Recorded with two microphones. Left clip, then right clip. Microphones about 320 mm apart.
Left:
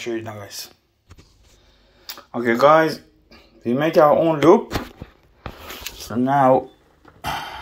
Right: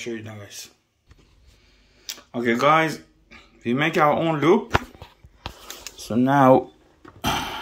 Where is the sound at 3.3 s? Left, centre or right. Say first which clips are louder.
Left 2 dB; centre.